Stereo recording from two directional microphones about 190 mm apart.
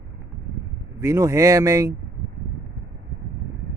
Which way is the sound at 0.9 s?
15° right (ahead or behind).